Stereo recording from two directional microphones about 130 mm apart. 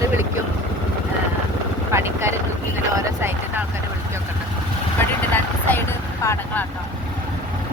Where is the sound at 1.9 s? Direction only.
20° right (ahead or behind).